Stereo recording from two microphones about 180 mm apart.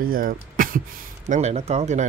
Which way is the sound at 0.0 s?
50° right (ahead or behind).